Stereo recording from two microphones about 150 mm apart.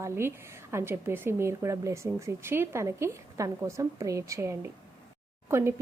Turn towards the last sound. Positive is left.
turn(degrees=-15)  # may be behind; listen again after turning